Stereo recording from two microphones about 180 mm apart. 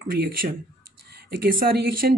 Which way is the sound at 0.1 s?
55° right (ahead or behind).